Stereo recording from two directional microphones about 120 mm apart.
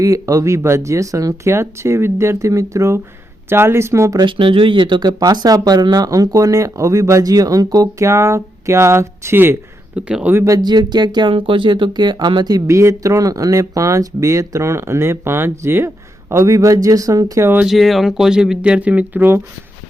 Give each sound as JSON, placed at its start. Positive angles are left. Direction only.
{"t": 0.0, "sound": "speech", "side_deg": -25}
{"t": 4.3, "sound": "speech", "side_deg": -45}
{"t": 10.3, "sound": "speech", "side_deg": -25}
{"t": 17.7, "sound": "speech", "side_deg": 0}